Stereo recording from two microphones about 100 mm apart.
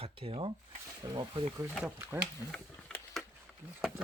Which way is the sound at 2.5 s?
10° left (ahead or behind).